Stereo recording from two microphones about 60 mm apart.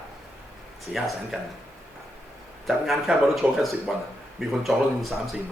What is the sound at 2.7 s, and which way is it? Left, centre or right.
Speech, centre.